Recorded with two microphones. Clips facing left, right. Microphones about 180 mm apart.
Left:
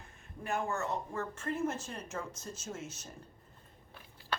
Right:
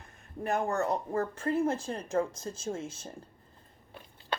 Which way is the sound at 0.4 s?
35° right (ahead or behind).